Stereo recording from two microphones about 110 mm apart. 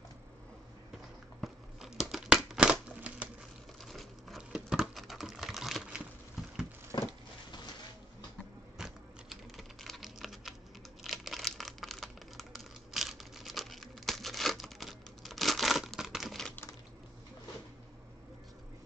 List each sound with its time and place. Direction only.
1.4 s scissors: 5° right (ahead or behind)
3.9 s typing: centre (ahead or behind)
6.9 s a sound: 35° left (ahead or behind)
8.7 s typing: 5° right (ahead or behind)
11.1 s crumpling: centre (ahead or behind)